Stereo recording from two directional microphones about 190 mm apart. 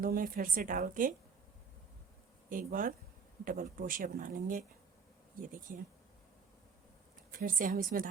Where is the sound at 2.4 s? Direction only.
45° right (ahead or behind).